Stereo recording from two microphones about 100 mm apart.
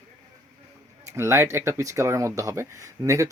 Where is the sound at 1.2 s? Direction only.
25° right (ahead or behind).